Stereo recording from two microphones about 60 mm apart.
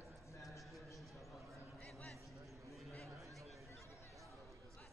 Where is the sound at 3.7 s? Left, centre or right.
Left.